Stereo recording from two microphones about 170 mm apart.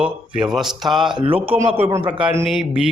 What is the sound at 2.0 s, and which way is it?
Speech, 10° right (ahead or behind).